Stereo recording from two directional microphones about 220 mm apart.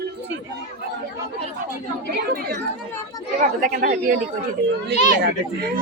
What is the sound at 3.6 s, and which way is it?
Speech, 45° right (ahead or behind).